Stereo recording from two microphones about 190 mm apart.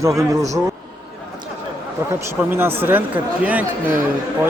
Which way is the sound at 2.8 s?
10° right (ahead or behind).